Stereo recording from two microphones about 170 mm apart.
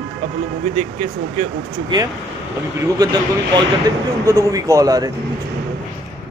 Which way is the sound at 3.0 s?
25° right (ahead or behind).